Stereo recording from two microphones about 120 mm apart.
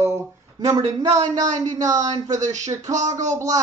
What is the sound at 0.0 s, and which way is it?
Speech, 25° right (ahead or behind).